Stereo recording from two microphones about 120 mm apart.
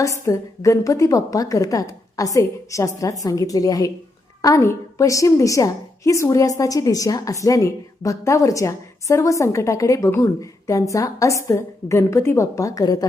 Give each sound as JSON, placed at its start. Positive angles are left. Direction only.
{"t": 0.3, "sound": "a woman's voice", "side_deg": 25}